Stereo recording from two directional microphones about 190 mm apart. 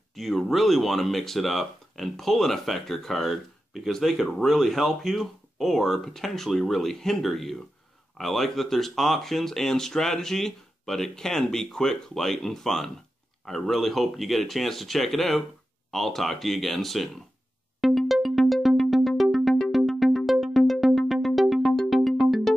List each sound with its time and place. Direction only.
0.1 s speech: centre (ahead or behind)
17.7 s music: centre (ahead or behind)